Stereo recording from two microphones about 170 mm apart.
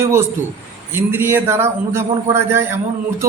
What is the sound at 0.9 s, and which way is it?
A man's voice, 15° right (ahead or behind).